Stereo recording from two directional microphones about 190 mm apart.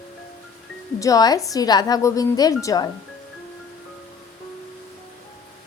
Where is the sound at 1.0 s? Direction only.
20° left (ahead or behind).